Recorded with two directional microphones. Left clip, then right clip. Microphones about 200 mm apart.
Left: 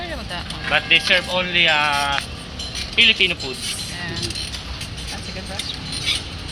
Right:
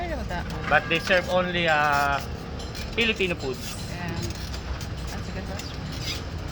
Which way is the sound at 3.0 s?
40° right (ahead or behind).